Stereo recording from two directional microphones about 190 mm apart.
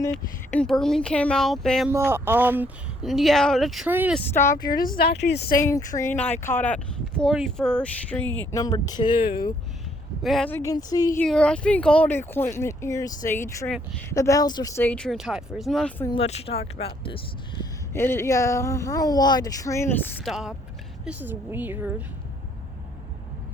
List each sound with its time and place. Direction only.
0.1 s speech: 5° left (ahead or behind)
2.0 s speech: 10° right (ahead or behind)
4.3 s speech: 15° left (ahead or behind)
4.5 s speech: 50° left (ahead or behind)
5.5 s speech: 15° left (ahead or behind)
8.5 s speech: 20° left (ahead or behind)
10.2 s speech: centre (ahead or behind)
10.5 s speech: 15° left (ahead or behind)
11.2 s speech: 5° left (ahead or behind); by 14.8 s 20° left (ahead or behind)
14.8 s speech: 5° left (ahead or behind)
16.0 s speech: 30° left (ahead or behind)
17.6 s speech: 15° left (ahead or behind)
20.2 s a woman's voice: centre (ahead or behind)